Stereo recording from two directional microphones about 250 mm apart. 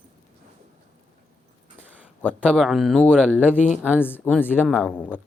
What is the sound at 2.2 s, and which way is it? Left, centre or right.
Speech, centre.